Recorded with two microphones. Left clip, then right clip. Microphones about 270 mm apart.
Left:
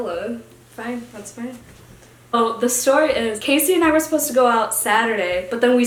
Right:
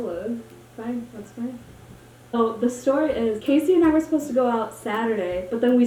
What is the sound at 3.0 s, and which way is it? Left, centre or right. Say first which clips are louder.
Speech: left 5 dB; left.